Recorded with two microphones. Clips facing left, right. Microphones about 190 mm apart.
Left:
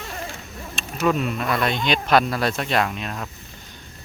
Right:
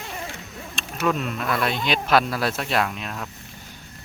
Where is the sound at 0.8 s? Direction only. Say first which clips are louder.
Left 3 dB; centre (ahead or behind).